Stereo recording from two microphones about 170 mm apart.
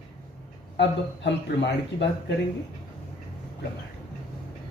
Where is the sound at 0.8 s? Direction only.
90° left.